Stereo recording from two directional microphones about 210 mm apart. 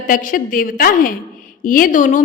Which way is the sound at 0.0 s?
40° left (ahead or behind).